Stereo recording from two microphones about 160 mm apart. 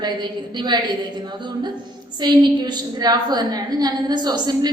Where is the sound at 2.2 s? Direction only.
25° right (ahead or behind).